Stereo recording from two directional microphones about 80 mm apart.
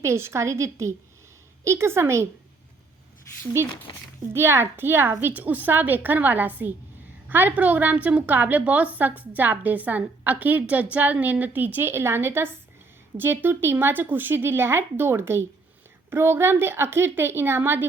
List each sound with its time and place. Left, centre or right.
0.0 s a woman's voice: right
4.4 s a woman's voice: right